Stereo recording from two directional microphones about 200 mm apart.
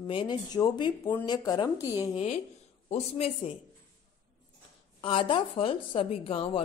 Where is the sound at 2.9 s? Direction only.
30° left (ahead or behind).